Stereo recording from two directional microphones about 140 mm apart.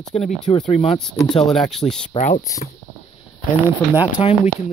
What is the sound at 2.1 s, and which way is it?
Speech, 50° left (ahead or behind).